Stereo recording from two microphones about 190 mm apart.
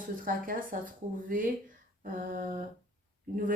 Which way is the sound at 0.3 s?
45° right (ahead or behind).